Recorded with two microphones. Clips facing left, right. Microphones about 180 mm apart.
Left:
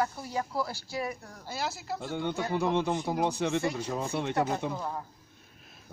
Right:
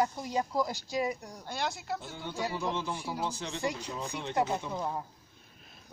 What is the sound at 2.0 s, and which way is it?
Speech, 60° left (ahead or behind).